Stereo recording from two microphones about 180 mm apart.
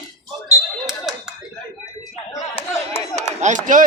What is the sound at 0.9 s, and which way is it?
Clapping, centre (ahead or behind).